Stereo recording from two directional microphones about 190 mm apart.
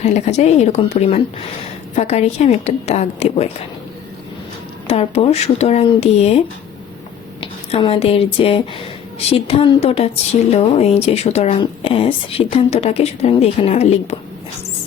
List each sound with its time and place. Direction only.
0.0 s speech: 35° left (ahead or behind)
4.9 s speech: 30° left (ahead or behind)
7.4 s speech: 30° left (ahead or behind)